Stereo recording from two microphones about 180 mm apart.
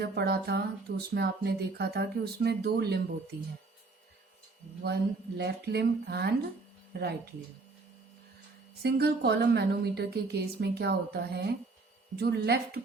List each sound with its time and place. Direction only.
0.0 s speech: 60° right (ahead or behind)
5.4 s speech: 65° right (ahead or behind)
8.8 s speech: 65° right (ahead or behind)